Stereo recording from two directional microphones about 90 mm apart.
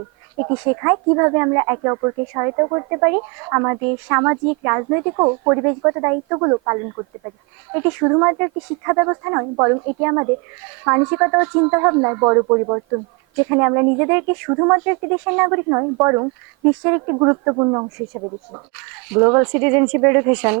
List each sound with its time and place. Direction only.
0.3 s speech: 25° right (ahead or behind)